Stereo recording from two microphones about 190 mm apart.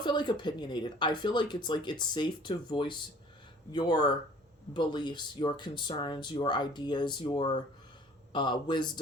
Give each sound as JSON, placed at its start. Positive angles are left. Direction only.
{"t": 0.0, "sound": "speech", "side_deg": 25}